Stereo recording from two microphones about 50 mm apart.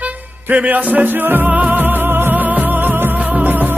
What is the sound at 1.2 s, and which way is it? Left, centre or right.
Music, right.